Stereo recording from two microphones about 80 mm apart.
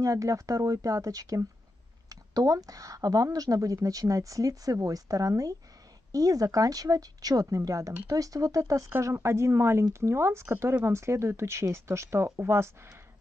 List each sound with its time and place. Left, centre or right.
0.0 s speech: right
9.0 s speech: right